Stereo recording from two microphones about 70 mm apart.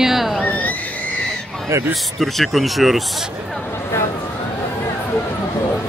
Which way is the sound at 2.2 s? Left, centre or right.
Centre.